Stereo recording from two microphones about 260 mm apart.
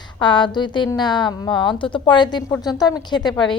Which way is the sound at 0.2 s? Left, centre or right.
Centre.